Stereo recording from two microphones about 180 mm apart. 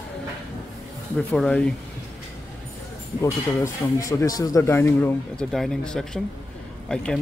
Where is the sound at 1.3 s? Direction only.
5° left (ahead or behind).